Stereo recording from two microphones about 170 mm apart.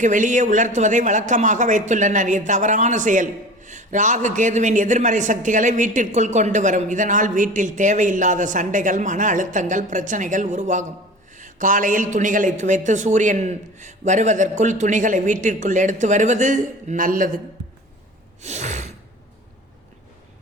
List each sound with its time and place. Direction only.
0.0 s a man's voice: 50° right (ahead or behind)
18.4 s gasp: 40° right (ahead or behind)